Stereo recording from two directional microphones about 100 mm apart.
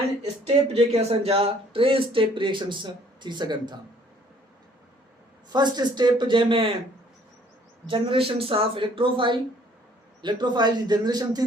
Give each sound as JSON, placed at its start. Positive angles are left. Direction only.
{"t": 0.2, "sound": "speech", "side_deg": -90}
{"t": 5.5, "sound": "speech", "side_deg": -45}
{"t": 7.9, "sound": "speech", "side_deg": -65}